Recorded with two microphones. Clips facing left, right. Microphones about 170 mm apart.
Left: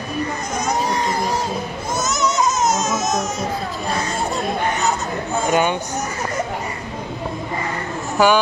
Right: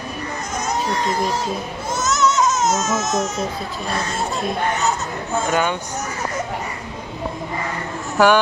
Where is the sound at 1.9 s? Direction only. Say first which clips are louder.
Right 2 dB; 15° left (ahead or behind).